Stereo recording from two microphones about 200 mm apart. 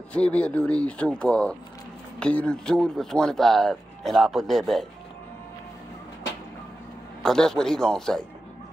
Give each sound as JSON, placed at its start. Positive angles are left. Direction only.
{"t": 0.1, "sound": "speech", "side_deg": 5}
{"t": 7.2, "sound": "speech", "side_deg": 5}